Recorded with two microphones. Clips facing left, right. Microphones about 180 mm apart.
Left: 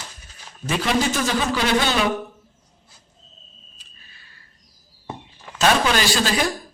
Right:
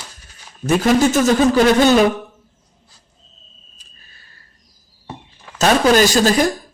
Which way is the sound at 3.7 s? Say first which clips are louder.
Right 1 dB; 45° right (ahead or behind).